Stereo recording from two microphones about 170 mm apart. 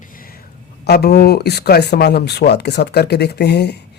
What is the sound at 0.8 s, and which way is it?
Speech, 70° left (ahead or behind).